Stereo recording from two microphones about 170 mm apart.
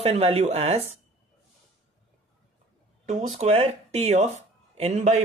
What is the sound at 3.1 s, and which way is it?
Speech, 40° right (ahead or behind).